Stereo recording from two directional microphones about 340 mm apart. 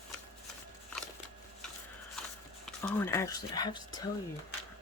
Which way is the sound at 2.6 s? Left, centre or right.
Centre.